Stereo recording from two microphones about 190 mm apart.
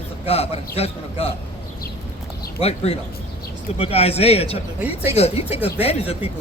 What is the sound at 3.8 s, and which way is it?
A man's voice, 30° left (ahead or behind).